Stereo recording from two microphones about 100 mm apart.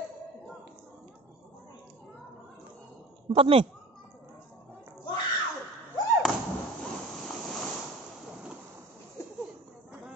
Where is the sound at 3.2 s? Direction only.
60° right (ahead or behind).